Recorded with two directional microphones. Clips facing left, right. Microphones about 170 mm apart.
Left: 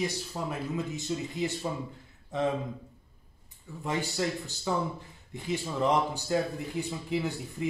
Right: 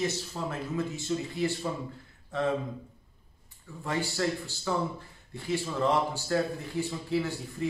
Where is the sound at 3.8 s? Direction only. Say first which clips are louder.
Even; 20° left (ahead or behind).